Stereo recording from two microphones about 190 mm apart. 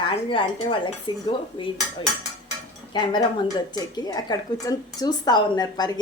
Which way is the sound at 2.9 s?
25° left (ahead or behind).